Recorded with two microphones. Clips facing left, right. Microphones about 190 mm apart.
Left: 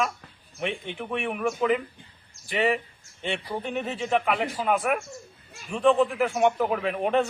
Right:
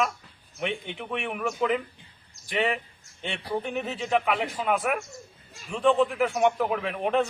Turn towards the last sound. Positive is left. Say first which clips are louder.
# left 1 dB
turn(degrees=0)  # may be behind; listen again after turning